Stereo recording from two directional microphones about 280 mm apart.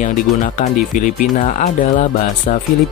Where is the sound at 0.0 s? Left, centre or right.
Left.